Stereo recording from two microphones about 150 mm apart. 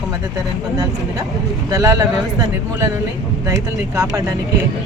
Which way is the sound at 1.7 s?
20° right (ahead or behind).